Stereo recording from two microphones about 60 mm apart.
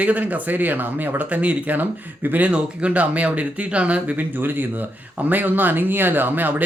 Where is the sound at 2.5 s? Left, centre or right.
Centre.